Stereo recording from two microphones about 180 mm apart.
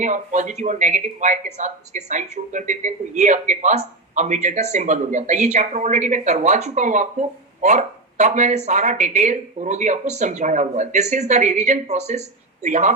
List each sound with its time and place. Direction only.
0.0 s speech: 45° right (ahead or behind)